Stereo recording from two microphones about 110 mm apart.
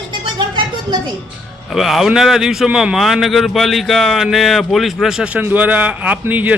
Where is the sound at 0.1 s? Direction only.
45° right (ahead or behind).